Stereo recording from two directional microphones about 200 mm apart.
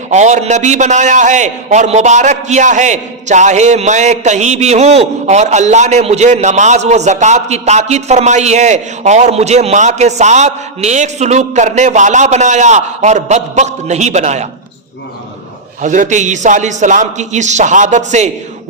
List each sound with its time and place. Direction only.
0.1 s a man's voice: 35° right (ahead or behind)
15.8 s a man's voice: 40° right (ahead or behind)